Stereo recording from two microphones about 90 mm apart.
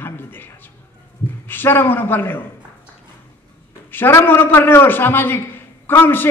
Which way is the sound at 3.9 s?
25° left (ahead or behind).